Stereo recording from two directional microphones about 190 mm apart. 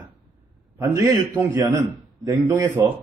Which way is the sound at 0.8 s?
15° right (ahead or behind).